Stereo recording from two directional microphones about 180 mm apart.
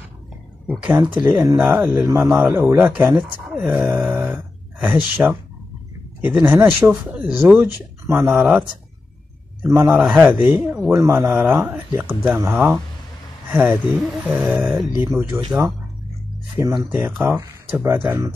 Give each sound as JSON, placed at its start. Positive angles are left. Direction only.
{"t": 0.9, "sound": "speech", "side_deg": -15}
{"t": 2.4, "sound": "speech", "side_deg": -5}
{"t": 16.5, "sound": "speech", "side_deg": -15}